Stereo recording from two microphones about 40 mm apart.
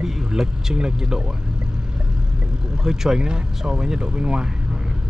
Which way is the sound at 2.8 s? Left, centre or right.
Centre.